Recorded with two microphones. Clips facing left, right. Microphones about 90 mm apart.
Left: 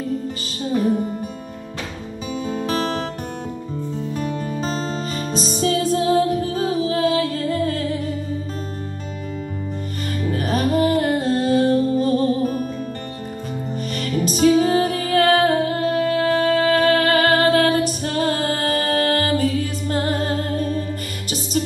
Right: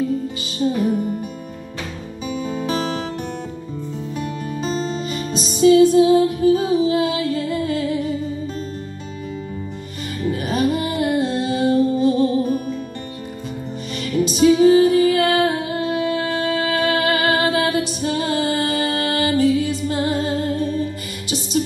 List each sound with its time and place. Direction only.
2.4 s music: 40° left (ahead or behind)
4.1 s music: 40° left (ahead or behind)
10.3 s music: 40° left (ahead or behind)
13.9 s music: 40° left (ahead or behind)